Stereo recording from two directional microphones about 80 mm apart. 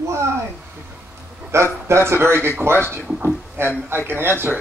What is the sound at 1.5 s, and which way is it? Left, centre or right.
A man's voice, right.